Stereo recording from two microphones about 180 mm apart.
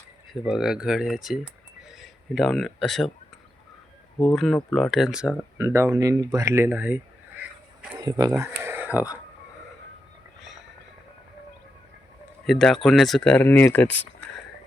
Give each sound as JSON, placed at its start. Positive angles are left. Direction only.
{"t": 0.4, "sound": "a man's voice", "side_deg": -5}
{"t": 4.4, "sound": "speech", "side_deg": 0}
{"t": 5.5, "sound": "speech", "side_deg": -15}
{"t": 7.9, "sound": "speech", "side_deg": -20}
{"t": 8.4, "sound": "a sound", "side_deg": -10}
{"t": 12.5, "sound": "speech", "side_deg": 0}